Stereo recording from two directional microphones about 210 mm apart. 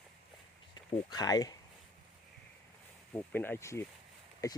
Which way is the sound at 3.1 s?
10° left (ahead or behind).